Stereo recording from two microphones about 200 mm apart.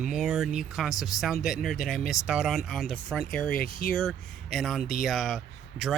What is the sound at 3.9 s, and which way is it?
Speech, 5° left (ahead or behind).